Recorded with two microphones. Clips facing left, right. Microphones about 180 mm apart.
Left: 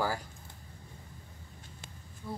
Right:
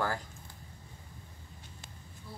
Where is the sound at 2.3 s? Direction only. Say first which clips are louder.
Left 9 dB; 55° left (ahead or behind).